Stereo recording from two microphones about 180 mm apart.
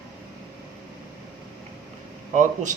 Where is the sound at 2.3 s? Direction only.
45° right (ahead or behind).